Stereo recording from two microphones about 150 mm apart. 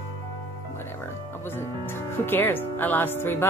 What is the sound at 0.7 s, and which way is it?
Music, 15° left (ahead or behind).